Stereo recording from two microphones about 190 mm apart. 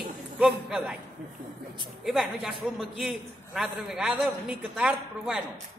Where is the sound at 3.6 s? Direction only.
Centre (ahead or behind).